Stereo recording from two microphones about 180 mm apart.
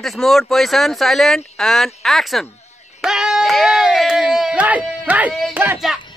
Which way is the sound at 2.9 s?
5° right (ahead or behind).